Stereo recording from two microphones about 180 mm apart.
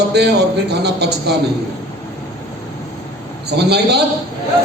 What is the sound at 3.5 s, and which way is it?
Speech, 65° right (ahead or behind).